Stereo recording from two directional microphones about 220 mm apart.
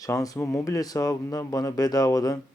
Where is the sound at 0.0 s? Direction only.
15° left (ahead or behind).